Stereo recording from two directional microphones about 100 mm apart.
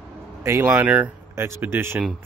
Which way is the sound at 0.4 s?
30° right (ahead or behind).